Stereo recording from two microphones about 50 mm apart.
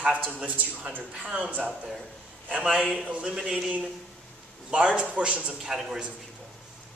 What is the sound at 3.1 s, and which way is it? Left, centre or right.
A man's voice, right.